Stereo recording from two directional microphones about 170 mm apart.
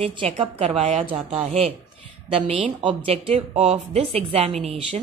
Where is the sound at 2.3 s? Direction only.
30° right (ahead or behind).